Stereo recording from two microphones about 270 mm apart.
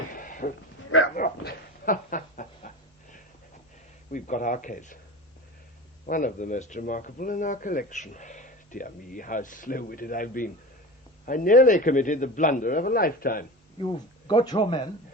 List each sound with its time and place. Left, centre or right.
0.2 s livestock: left
1.1 s a sound: left
4.1 s speech: left
6.1 s a man's voice: left
13.7 s speech: centre